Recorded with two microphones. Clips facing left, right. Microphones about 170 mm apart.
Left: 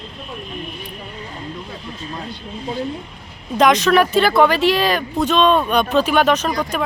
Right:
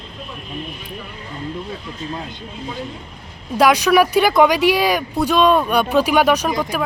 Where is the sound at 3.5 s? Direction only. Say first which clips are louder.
Even; 10° right (ahead or behind).